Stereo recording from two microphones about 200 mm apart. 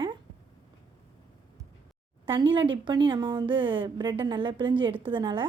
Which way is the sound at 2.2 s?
25° right (ahead or behind).